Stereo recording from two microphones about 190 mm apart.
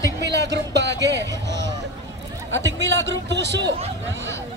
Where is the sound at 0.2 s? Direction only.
65° right (ahead or behind).